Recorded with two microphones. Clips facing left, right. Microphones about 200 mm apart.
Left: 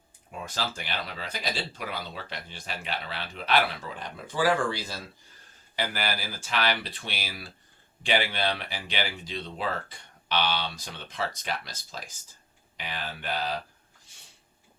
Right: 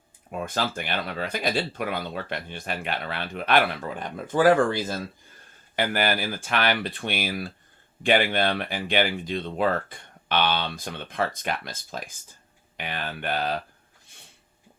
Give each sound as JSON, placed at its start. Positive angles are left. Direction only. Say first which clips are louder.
{"t": 0.3, "sound": "speech", "louder": "right 6 dB", "side_deg": -55}